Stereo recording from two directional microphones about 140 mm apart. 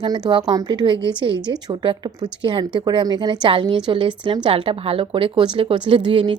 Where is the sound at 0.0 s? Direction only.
30° right (ahead or behind).